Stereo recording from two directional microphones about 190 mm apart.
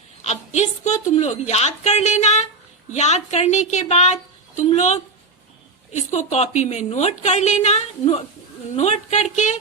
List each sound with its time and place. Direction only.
0.2 s a woman's voice: 35° left (ahead or behind)